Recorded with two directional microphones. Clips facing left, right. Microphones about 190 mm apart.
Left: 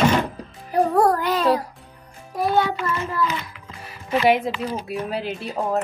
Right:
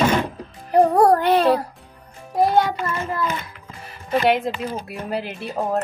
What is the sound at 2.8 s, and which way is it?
Speech, 50° right (ahead or behind).